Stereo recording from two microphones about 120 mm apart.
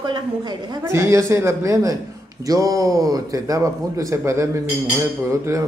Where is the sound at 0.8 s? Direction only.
25° right (ahead or behind).